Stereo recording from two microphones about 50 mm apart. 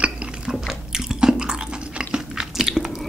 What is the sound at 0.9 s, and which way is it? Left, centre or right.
Chewing, centre.